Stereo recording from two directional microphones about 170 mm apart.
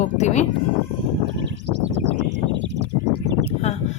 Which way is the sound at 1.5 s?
90° right.